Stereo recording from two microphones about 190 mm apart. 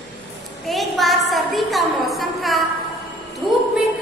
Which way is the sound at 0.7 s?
Centre (ahead or behind).